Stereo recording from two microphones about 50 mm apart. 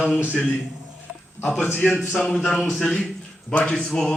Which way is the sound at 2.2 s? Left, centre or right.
Centre.